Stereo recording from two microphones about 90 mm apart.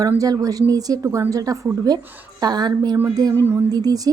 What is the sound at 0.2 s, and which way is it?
A woman's voice, 45° right (ahead or behind).